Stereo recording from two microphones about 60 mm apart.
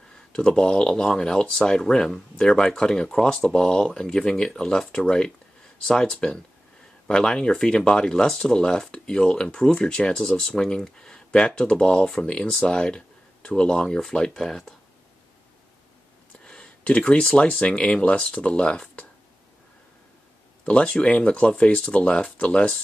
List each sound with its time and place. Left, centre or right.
0.3 s speech: centre
16.4 s speech: centre
20.6 s speech: centre